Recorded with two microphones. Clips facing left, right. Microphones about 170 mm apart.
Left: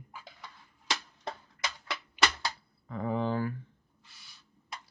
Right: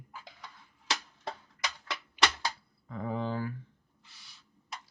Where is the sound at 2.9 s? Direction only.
60° left (ahead or behind).